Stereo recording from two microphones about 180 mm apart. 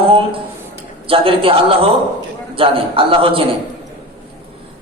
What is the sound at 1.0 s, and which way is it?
A man's voice, 30° right (ahead or behind).